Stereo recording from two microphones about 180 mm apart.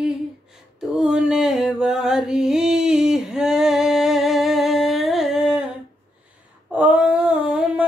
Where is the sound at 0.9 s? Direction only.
5° right (ahead or behind).